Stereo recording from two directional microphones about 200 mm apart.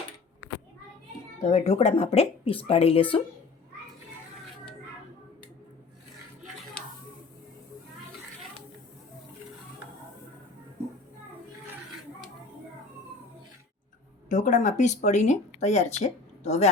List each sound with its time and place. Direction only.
1.5 s speech: 35° left (ahead or behind)
14.3 s speech: 40° left (ahead or behind)